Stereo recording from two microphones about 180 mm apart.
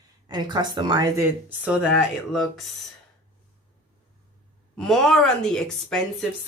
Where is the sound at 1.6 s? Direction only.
Centre (ahead or behind).